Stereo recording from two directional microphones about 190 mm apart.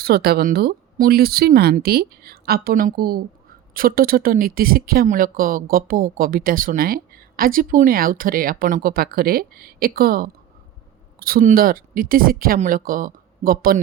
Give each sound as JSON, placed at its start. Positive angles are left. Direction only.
{"t": 0.0, "sound": "speech", "side_deg": -55}